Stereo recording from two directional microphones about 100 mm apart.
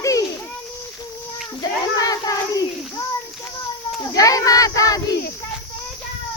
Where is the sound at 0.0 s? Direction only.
35° left (ahead or behind).